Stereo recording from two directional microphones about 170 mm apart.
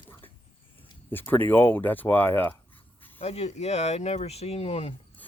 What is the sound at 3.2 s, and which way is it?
Speech, 40° left (ahead or behind).